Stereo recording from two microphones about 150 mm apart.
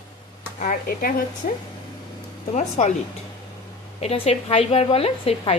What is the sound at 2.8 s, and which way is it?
Dishes, 55° left (ahead or behind).